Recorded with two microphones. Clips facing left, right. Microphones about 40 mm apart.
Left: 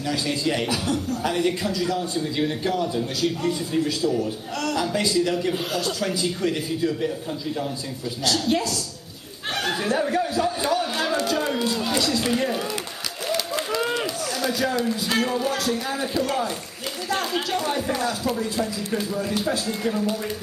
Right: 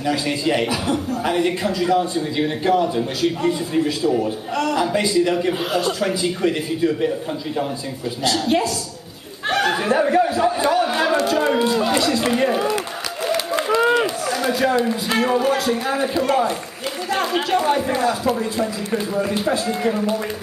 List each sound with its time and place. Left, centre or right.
0.0 s a man's voice: right
8.2 s a man's voice: right